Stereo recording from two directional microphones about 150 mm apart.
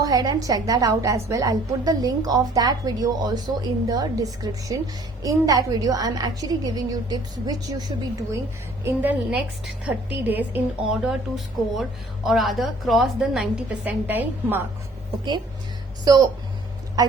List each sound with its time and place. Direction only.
0.0 s a woman's voice: 25° right (ahead or behind)
8.8 s a woman's voice: 10° right (ahead or behind)